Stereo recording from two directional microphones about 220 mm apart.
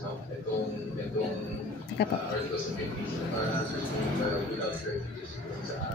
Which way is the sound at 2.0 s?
50° left (ahead or behind).